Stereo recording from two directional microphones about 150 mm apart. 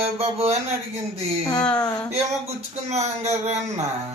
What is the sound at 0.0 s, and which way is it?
Speech, 45° right (ahead or behind).